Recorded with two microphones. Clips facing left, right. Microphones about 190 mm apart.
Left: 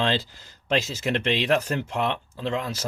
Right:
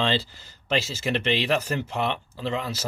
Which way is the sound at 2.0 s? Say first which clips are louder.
Left 1 dB; 10° right (ahead or behind).